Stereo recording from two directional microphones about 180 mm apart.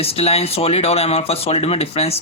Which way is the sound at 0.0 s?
35° left (ahead or behind).